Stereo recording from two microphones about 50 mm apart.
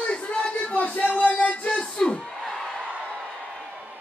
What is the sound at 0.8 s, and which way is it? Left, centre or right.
Music, left.